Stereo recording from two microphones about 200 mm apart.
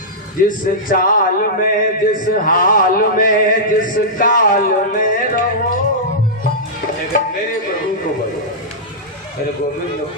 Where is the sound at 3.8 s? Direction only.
40° left (ahead or behind).